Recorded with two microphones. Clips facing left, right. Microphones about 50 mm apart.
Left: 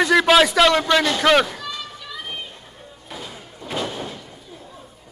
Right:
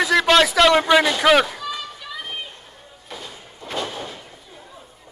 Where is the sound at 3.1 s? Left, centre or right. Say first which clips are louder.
Left 1 dB; centre.